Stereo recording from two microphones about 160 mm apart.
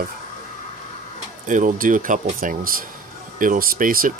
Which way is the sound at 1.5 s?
55° right (ahead or behind).